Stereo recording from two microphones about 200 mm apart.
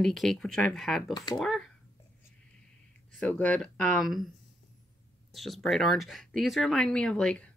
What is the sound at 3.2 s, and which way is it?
Speech, 5° left (ahead or behind).